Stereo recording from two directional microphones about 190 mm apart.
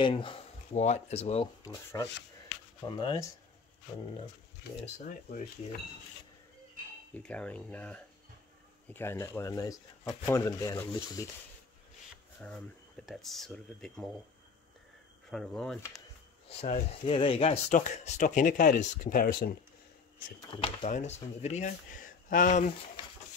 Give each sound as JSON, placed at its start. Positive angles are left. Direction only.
{"t": 0.0, "sound": "speech", "side_deg": 25}
{"t": 1.6, "sound": "rub", "side_deg": 15}
{"t": 3.0, "sound": "speech", "side_deg": 20}
{"t": 5.0, "sound": "speech", "side_deg": 45}
{"t": 7.2, "sound": "speech", "side_deg": 5}
{"t": 12.4, "sound": "speech", "side_deg": 5}
{"t": 15.2, "sound": "speech", "side_deg": 5}
{"t": 17.0, "sound": "speech", "side_deg": 30}
{"t": 20.5, "sound": "speech", "side_deg": 35}